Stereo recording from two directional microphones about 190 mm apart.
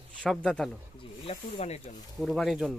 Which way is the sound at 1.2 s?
35° left (ahead or behind).